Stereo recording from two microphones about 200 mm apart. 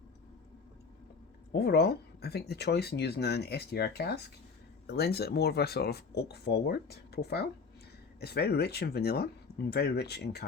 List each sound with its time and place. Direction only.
1.5 s speech: 55° left (ahead or behind)